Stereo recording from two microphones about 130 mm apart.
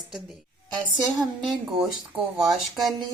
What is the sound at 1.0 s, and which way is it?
Speech, centre (ahead or behind).